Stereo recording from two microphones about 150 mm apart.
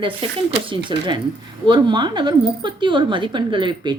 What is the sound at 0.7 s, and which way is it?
A woman's voice, 30° right (ahead or behind).